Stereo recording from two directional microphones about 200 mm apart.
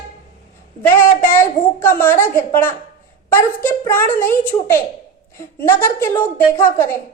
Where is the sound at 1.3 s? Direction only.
10° left (ahead or behind).